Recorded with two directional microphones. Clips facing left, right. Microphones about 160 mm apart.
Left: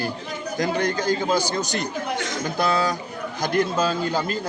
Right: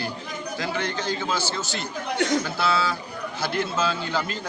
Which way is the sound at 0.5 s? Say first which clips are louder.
Left 6 dB; 45° left (ahead or behind).